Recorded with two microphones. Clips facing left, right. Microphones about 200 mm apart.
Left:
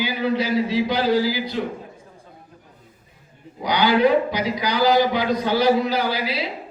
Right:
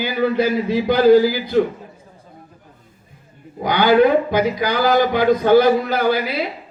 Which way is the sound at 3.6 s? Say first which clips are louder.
Right 4 dB; 50° right (ahead or behind).